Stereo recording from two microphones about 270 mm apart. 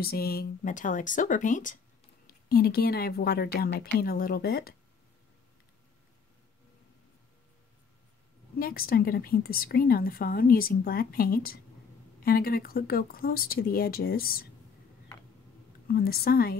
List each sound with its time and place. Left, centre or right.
0.0 s a woman's voice: left
8.5 s a woman's voice: left
15.9 s a woman's voice: left